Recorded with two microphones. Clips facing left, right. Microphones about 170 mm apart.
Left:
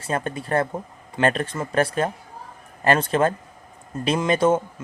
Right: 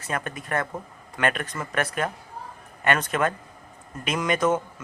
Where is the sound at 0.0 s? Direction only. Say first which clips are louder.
Left 5 dB; 30° left (ahead or behind).